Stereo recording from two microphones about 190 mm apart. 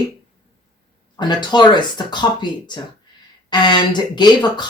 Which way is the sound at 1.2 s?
25° left (ahead or behind).